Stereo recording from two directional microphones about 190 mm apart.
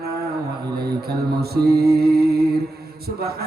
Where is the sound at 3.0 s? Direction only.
55° right (ahead or behind).